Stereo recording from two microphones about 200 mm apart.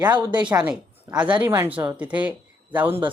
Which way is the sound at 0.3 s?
20° right (ahead or behind).